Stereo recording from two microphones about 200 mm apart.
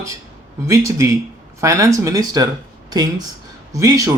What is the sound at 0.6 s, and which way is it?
Speech, 15° right (ahead or behind).